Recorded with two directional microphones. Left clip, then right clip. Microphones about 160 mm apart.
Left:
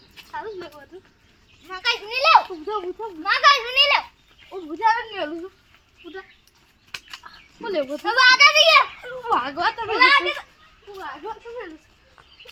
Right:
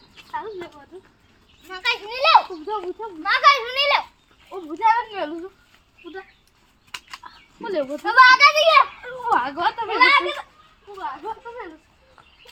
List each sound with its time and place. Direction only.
1.6 s a child's voice: centre (ahead or behind)
4.5 s speech: 10° left (ahead or behind)
7.6 s a child's voice: 5° right (ahead or behind)
7.9 s a child's voice: 30° left (ahead or behind)
9.8 s a child's voice: centre (ahead or behind)